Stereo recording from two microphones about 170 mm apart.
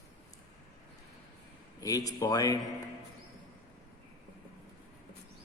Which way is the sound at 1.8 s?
20° left (ahead or behind).